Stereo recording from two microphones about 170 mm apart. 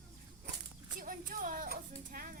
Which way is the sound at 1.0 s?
55° right (ahead or behind).